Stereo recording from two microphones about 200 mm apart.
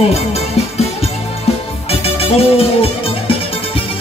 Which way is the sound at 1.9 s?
30° left (ahead or behind).